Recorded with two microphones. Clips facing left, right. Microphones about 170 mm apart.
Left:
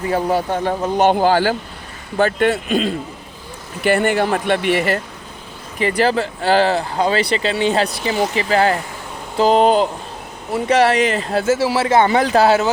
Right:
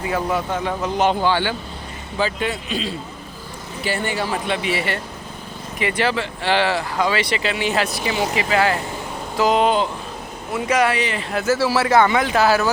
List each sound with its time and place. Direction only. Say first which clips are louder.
0.1 s speech: left 4 dB; 35° left (ahead or behind)
2.1 s speech: left 7 dB; 55° left (ahead or behind)
5.8 s a man's voice: left 5 dB; 35° left (ahead or behind)